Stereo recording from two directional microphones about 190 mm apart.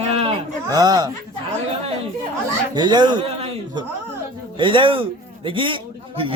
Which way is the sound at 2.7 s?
20° right (ahead or behind).